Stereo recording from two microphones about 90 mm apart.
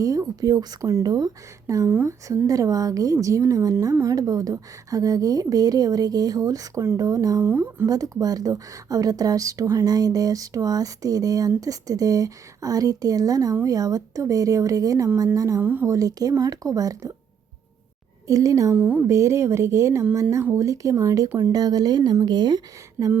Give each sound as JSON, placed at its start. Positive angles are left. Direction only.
{"t": 0.0, "sound": "speech", "side_deg": -40}
{"t": 1.9, "sound": "speech", "side_deg": -25}
{"t": 2.5, "sound": "a woman's voice", "side_deg": -40}
{"t": 7.4, "sound": "speech", "side_deg": -30}
{"t": 7.9, "sound": "a woman's voice", "side_deg": -45}
{"t": 18.3, "sound": "a woman's voice", "side_deg": -40}
{"t": 18.7, "sound": "speech", "side_deg": -15}
{"t": 19.0, "sound": "a woman's voice", "side_deg": -35}